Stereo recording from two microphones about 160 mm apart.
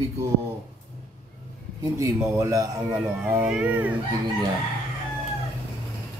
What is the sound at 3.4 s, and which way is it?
Speech, 5° right (ahead or behind).